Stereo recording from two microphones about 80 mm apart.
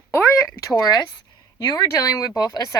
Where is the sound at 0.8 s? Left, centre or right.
Left.